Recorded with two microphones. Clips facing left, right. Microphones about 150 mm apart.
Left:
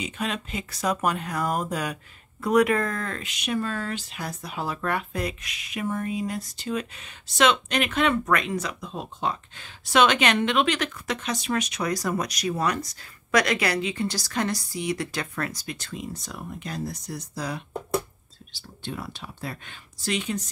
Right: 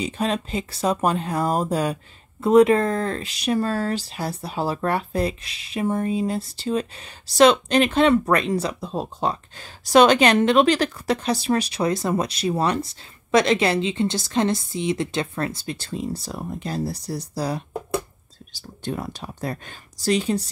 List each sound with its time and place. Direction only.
0.0 s speech: 35° right (ahead or behind)